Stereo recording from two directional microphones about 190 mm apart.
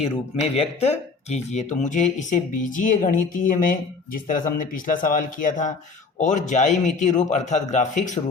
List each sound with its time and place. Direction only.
0.5 s speech: 35° left (ahead or behind)